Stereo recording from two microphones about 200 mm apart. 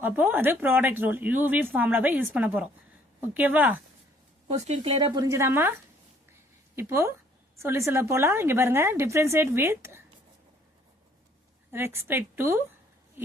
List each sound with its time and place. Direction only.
0.0 s speech: 10° right (ahead or behind)
4.4 s speech: 35° right (ahead or behind); by 10.0 s 10° right (ahead or behind)
12.0 s speech: 10° right (ahead or behind)
13.2 s a sound: 10° right (ahead or behind)